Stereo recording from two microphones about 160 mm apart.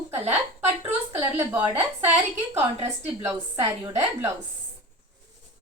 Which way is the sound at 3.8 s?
20° right (ahead or behind).